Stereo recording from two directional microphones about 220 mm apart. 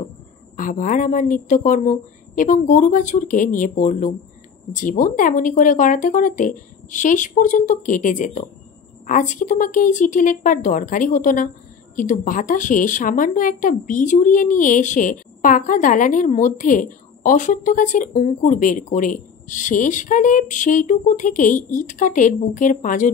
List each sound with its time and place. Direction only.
0.6 s speech: 35° left (ahead or behind)